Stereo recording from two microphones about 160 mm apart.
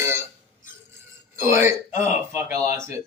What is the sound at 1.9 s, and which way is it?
Speech, 50° left (ahead or behind).